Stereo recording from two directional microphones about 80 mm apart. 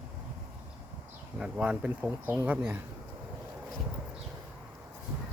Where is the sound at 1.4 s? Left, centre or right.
Centre.